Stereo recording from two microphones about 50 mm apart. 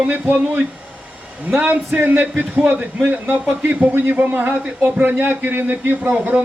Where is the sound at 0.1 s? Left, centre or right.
Right.